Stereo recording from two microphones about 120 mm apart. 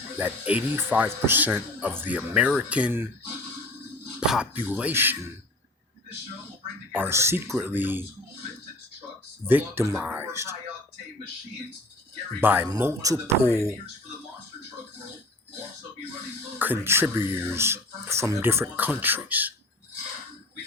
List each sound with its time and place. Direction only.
0.2 s speech: 15° right (ahead or behind)
4.2 s speech: 5° right (ahead or behind)
6.9 s speech: 20° right (ahead or behind)
9.5 s speech: 15° right (ahead or behind)
12.4 s speech: 15° right (ahead or behind)
16.6 s speech: 15° right (ahead or behind)